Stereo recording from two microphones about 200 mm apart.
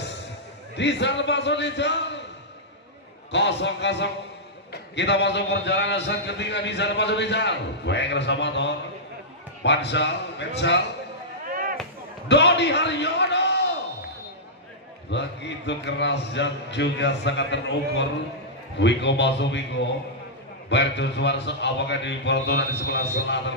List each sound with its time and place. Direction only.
0.7 s a man's voice: 60° left (ahead or behind)
3.3 s a man's voice: 60° left (ahead or behind)
12.3 s a man's voice: 60° left (ahead or behind)
15.0 s a man's voice: 60° left (ahead or behind)